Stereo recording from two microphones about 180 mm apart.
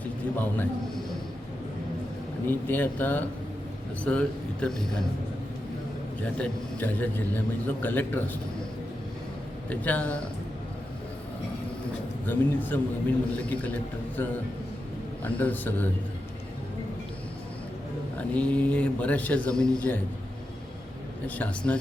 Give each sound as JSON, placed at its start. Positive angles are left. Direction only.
{"t": 0.3, "sound": "a man's voice", "side_deg": 10}
{"t": 2.5, "sound": "a man's voice", "side_deg": 10}
{"t": 6.3, "sound": "a man's voice", "side_deg": 10}
{"t": 9.6, "sound": "a man's voice", "side_deg": 10}
{"t": 12.2, "sound": "a man's voice", "side_deg": 10}
{"t": 18.2, "sound": "a man's voice", "side_deg": 5}
{"t": 21.2, "sound": "a man's voice", "side_deg": 10}